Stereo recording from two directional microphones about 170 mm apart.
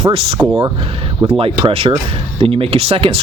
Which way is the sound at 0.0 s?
35° right (ahead or behind).